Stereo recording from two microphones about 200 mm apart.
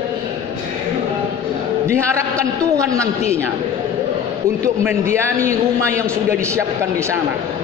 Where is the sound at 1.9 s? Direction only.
15° right (ahead or behind).